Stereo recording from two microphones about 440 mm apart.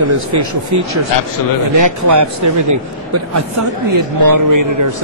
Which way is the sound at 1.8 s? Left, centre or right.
Right.